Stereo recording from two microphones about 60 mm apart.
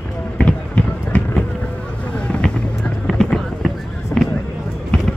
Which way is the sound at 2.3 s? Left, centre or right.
Centre.